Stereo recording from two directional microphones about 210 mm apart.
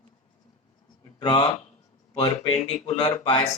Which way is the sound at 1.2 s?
20° left (ahead or behind).